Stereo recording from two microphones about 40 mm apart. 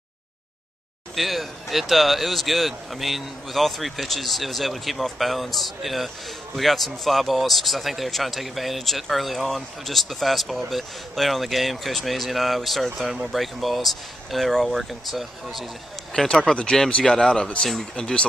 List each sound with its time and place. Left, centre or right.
1.1 s speech: centre
16.3 s speech: left